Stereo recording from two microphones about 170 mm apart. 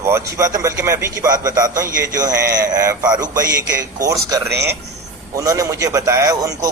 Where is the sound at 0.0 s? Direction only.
15° right (ahead or behind).